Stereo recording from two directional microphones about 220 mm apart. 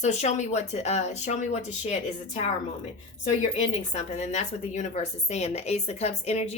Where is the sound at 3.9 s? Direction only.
30° left (ahead or behind).